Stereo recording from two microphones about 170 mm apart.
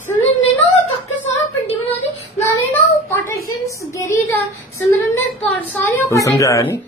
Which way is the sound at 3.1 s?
15° left (ahead or behind).